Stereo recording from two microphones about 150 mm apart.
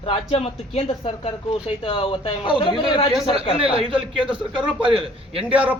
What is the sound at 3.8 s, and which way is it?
A man's voice, 35° right (ahead or behind).